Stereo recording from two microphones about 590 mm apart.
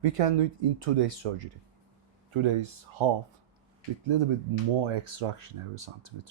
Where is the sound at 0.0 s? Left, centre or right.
Right.